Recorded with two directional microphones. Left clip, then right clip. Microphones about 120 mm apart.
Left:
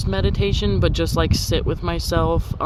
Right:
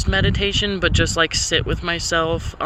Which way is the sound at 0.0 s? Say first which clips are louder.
Right 3 dB; 35° left (ahead or behind).